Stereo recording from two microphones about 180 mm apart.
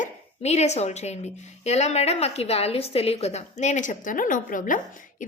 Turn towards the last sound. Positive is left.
turn(degrees=45)  # may be behind; listen again after turning